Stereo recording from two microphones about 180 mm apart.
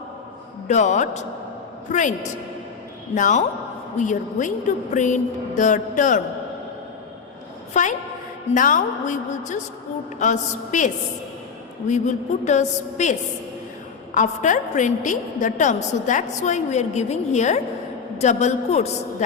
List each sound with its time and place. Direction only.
0.7 s a woman's voice: 40° left (ahead or behind)
7.7 s a woman's voice: 45° left (ahead or behind)
10.2 s a woman's voice: 45° left (ahead or behind)